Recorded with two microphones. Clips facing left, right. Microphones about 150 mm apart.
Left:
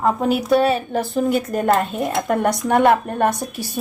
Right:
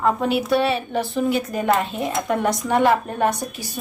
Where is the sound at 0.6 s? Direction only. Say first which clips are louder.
Left 3 dB; 45° left (ahead or behind).